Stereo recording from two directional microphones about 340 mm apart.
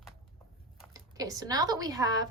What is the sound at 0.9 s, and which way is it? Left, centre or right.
Speech, centre.